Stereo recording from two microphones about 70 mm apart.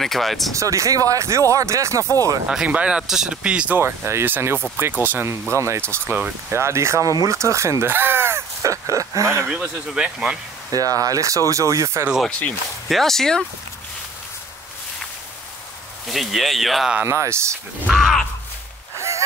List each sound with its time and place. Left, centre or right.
0.0 s speech: centre
0.5 s speech: right
2.5 s speech: centre
3.7 s speech: right
5.5 s speech: right
8.6 s speech: right
9.5 s speech: centre
10.7 s speech: right
12.3 s speech: centre
12.8 s speech: centre
16.1 s speech: centre
17.0 s speech: right
17.8 s speech: centre
18.9 s music: right